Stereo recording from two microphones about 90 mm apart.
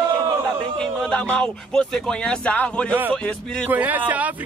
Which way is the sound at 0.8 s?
10° left (ahead or behind).